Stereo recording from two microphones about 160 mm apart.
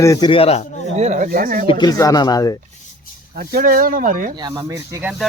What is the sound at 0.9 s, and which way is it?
Speech, 45° right (ahead or behind).